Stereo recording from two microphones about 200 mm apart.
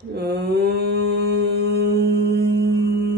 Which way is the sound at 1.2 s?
55° right (ahead or behind).